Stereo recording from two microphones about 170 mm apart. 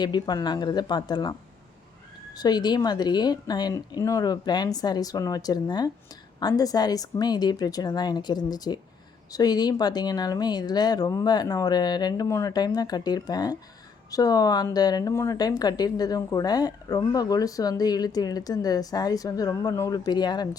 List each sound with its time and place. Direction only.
0.0 s a woman's voice: 25° left (ahead or behind)